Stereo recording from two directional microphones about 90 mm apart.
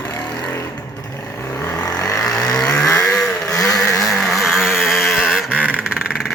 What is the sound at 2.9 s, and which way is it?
Vehicle, 5° left (ahead or behind).